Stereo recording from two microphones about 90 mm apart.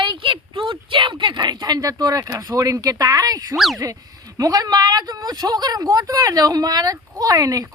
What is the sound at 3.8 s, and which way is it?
A woman's voice, 40° right (ahead or behind).